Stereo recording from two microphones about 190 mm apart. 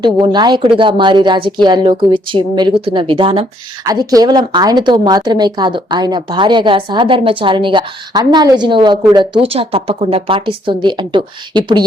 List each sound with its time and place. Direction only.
0.0 s a woman's voice: 25° right (ahead or behind)